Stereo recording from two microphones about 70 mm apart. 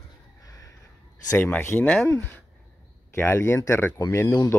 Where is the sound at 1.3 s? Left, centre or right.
Left.